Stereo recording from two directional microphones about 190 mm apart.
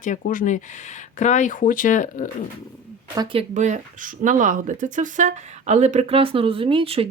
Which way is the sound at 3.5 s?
40° right (ahead or behind).